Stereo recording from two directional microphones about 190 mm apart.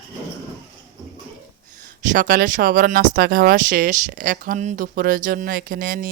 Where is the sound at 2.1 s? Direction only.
45° right (ahead or behind).